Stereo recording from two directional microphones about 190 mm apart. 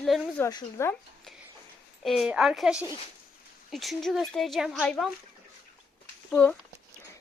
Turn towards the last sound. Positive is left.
turn(degrees=5)  # may be behind; listen again after turning